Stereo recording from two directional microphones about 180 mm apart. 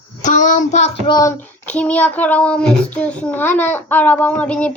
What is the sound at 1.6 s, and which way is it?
A child's voice, 10° left (ahead or behind).